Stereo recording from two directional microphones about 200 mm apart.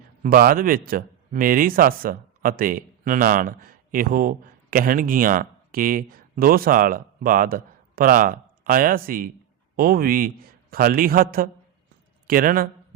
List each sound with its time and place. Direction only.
0.2 s a man's voice: 45° right (ahead or behind)